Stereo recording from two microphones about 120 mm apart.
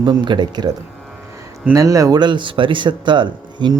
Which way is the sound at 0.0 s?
40° right (ahead or behind).